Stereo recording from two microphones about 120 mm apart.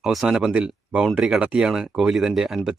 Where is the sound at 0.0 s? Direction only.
Centre (ahead or behind).